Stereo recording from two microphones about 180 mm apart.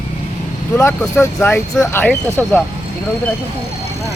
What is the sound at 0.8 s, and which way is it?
Speech, 15° left (ahead or behind).